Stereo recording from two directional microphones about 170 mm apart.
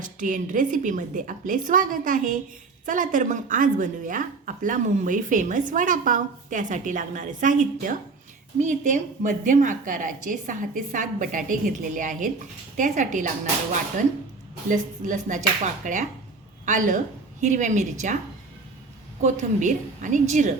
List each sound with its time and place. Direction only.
0.0 s a woman's voice: 50° right (ahead or behind)
14.7 s a woman's voice: 50° right (ahead or behind)
19.2 s a woman's voice: 45° right (ahead or behind)